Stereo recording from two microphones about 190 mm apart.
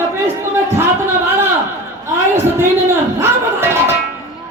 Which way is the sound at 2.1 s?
15° right (ahead or behind).